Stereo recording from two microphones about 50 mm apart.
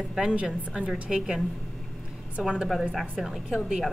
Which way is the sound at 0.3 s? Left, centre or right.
Right.